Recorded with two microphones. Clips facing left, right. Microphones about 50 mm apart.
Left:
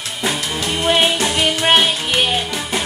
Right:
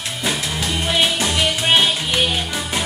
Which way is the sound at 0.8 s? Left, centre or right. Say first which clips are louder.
Left 4 dB; left.